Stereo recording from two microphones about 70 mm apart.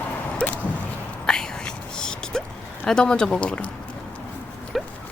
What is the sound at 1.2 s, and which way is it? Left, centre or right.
Whispering, centre.